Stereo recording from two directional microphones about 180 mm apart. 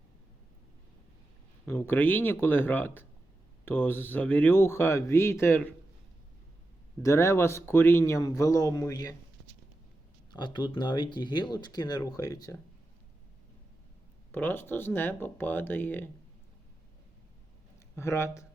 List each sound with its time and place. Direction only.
1.6 s speech: 10° left (ahead or behind)
7.0 s speech: 15° left (ahead or behind)
10.3 s speech: 25° left (ahead or behind)
14.3 s speech: 10° left (ahead or behind)
17.9 s speech: 15° left (ahead or behind)